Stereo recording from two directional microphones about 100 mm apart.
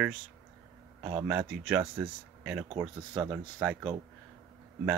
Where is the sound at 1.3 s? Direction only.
15° right (ahead or behind).